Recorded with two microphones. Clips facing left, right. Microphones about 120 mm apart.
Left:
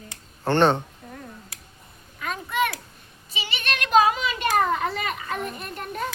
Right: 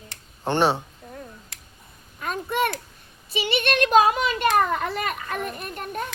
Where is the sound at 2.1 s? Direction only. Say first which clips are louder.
Right 1 dB; 45° right (ahead or behind).